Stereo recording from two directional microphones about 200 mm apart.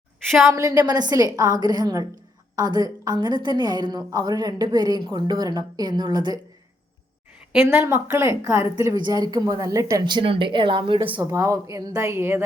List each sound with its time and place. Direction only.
0.3 s a woman's voice: centre (ahead or behind)
0.5 s a woman's voice: 15° right (ahead or behind)
7.7 s a woman's voice: 10° right (ahead or behind)